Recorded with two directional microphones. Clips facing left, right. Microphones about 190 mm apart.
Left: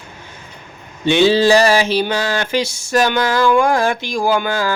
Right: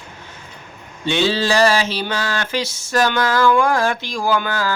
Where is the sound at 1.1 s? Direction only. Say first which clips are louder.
Left 7 dB; 15° left (ahead or behind).